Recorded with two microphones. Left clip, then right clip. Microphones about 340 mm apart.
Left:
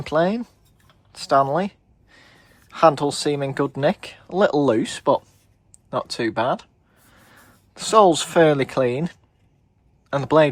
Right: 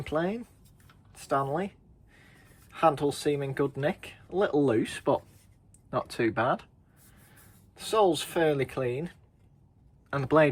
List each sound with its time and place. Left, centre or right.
0.0 s speech: centre
7.7 s speech: centre